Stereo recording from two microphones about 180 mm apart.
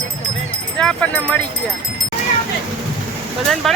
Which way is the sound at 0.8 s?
5° left (ahead or behind).